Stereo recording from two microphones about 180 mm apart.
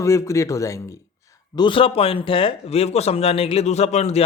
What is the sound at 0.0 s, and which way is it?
Speech, 15° left (ahead or behind).